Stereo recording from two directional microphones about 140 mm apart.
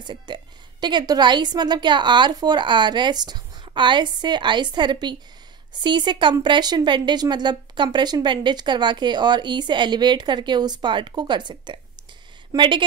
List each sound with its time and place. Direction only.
0.0 s speech: 35° right (ahead or behind)